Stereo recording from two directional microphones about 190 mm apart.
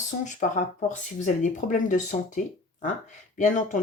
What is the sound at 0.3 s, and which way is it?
Speech, 40° left (ahead or behind).